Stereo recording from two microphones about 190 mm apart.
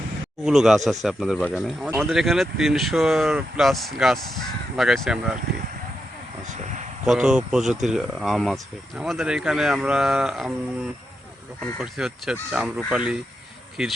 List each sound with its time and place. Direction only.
0.4 s speech: centre (ahead or behind)
6.4 s a sound: 40° right (ahead or behind)
7.0 s speech: 5° right (ahead or behind)
11.6 s speech: centre (ahead or behind)